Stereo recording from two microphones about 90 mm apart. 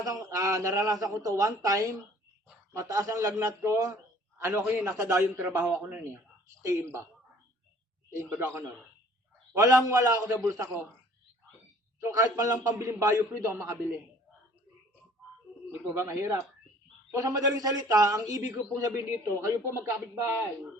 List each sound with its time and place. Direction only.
0.0 s a man's voice: 35° right (ahead or behind); by 6.0 s 15° right (ahead or behind)
6.6 s a man's voice: 30° right (ahead or behind)
8.2 s a man's voice: 30° right (ahead or behind)
11.9 s a man's voice: 30° right (ahead or behind)
16.0 s a man's voice: 30° right (ahead or behind)